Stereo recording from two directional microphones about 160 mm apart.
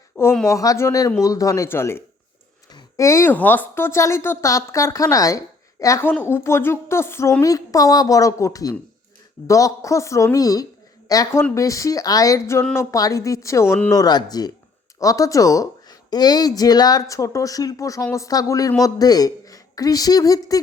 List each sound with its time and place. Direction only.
0.4 s speech: 20° left (ahead or behind)